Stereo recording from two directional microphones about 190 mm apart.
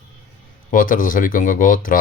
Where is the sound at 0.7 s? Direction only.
45° left (ahead or behind).